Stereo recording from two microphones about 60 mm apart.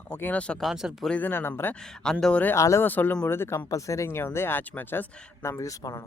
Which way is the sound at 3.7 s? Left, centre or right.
Left.